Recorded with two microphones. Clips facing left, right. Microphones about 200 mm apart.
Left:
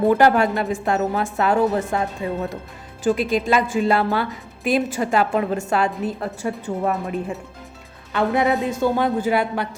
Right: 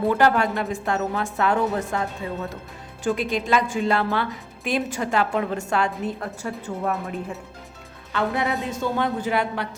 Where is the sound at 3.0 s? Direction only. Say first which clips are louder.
Left 4 dB; 5° left (ahead or behind).